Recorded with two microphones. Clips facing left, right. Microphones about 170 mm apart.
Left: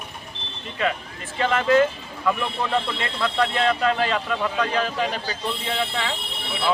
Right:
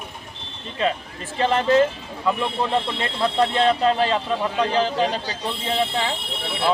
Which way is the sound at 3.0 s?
30° right (ahead or behind).